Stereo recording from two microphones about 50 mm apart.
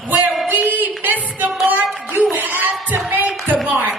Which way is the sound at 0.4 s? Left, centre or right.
Right.